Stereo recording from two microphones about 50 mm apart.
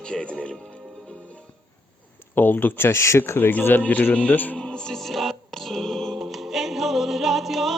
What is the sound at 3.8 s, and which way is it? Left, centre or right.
Speech, left.